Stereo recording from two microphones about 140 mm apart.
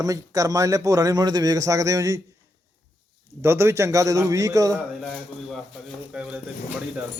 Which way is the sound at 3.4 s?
20° right (ahead or behind).